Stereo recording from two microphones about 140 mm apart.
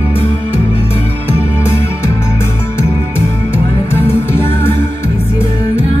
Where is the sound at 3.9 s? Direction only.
15° left (ahead or behind).